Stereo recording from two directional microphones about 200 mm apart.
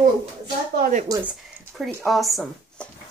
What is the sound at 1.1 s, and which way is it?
Speech, 5° right (ahead or behind).